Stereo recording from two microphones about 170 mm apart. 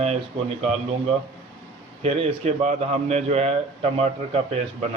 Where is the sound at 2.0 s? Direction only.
40° right (ahead or behind).